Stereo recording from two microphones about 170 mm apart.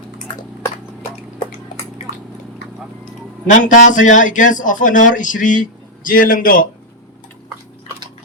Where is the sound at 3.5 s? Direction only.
50° left (ahead or behind).